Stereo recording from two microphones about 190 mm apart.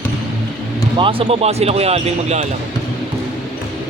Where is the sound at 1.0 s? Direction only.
30° right (ahead or behind).